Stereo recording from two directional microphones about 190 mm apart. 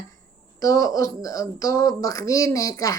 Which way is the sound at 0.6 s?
15° left (ahead or behind).